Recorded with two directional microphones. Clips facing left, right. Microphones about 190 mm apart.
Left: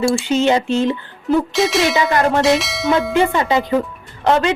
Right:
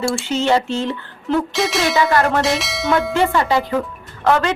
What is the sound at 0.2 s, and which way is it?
Speech, 15° left (ahead or behind).